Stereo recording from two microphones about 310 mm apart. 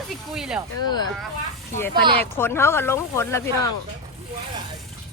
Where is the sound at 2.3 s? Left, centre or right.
Centre.